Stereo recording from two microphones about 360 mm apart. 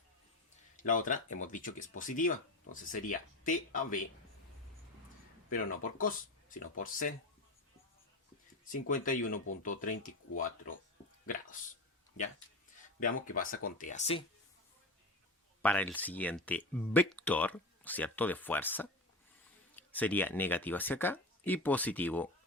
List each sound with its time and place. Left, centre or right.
0.8 s speech: left
5.5 s speech: left
8.9 s speech: left
13.0 s speech: left
15.6 s speech: centre